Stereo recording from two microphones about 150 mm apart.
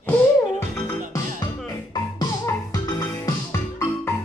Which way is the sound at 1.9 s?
25° left (ahead or behind).